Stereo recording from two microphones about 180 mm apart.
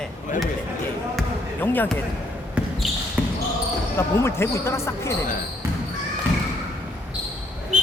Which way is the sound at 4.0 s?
15° left (ahead or behind).